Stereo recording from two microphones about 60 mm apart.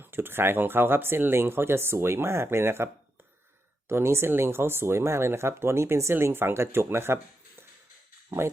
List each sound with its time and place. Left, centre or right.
0.0 s speech: right